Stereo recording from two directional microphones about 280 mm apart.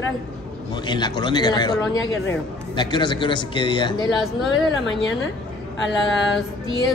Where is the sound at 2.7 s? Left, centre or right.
Centre.